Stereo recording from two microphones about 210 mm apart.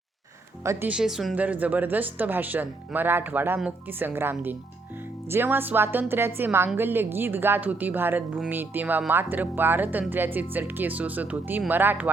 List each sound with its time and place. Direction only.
0.6 s a woman's voice: 10° right (ahead or behind)